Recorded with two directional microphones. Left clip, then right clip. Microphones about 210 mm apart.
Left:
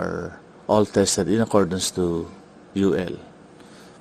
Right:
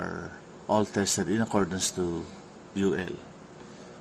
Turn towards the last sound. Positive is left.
turn(degrees=30)  # may be behind; listen again after turning